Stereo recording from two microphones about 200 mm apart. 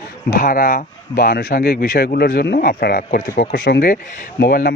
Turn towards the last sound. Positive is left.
turn(degrees=50)  # may be behind; listen again after turning